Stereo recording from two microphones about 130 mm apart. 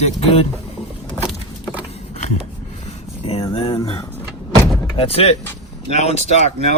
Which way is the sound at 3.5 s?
45° left (ahead or behind).